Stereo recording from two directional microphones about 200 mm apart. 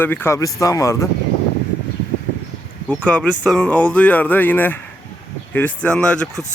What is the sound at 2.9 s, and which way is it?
Speech, 5° left (ahead or behind).